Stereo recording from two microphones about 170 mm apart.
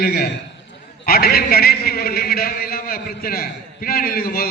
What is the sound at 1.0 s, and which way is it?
A man's voice, 60° left (ahead or behind).